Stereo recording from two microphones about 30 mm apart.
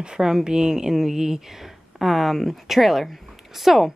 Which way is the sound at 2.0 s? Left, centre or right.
Centre.